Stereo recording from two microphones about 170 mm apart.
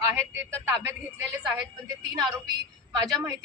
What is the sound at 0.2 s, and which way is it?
Speech, 15° right (ahead or behind).